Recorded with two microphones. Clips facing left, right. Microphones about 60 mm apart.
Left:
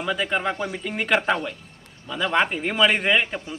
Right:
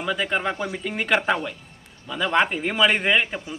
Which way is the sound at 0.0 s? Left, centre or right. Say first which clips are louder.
Even; centre.